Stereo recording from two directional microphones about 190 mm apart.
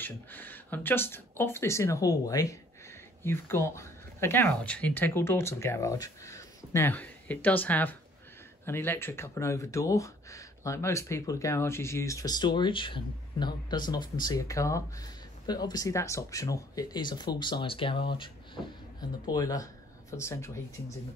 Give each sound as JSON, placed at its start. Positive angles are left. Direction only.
{"t": 0.0, "sound": "speech", "side_deg": 10}